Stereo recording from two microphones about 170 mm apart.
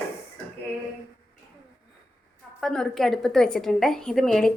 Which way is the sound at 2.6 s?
5° left (ahead or behind).